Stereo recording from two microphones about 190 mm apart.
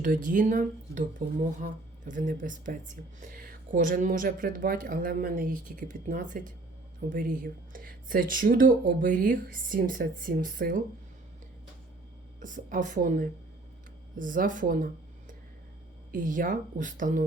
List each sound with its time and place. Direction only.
0.0 s speech: 45° right (ahead or behind)
12.4 s speech: 45° right (ahead or behind)
16.1 s speech: 45° right (ahead or behind)